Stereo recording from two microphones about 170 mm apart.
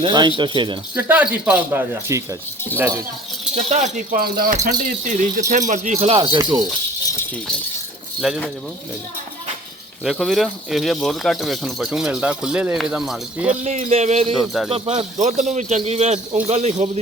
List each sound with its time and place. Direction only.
0.0 s speech: 25° right (ahead or behind)
0.9 s speech: 10° right (ahead or behind)
3.5 s a man's voice: 40° right (ahead or behind)
4.2 s speech: 60° right (ahead or behind); by 6.1 s 40° right (ahead or behind)
6.1 s speech: 25° right (ahead or behind)
8.2 s speech: 5° right (ahead or behind)
10.0 s speech: centre (ahead or behind)
13.7 s a man's voice: 40° right (ahead or behind)
14.3 s speech: centre (ahead or behind)
14.7 s a man's voice: 40° right (ahead or behind)